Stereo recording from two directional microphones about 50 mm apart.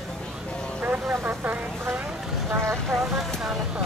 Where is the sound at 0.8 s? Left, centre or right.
Right.